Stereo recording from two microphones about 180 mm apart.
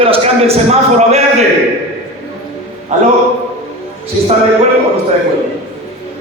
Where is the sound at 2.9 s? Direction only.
40° right (ahead or behind).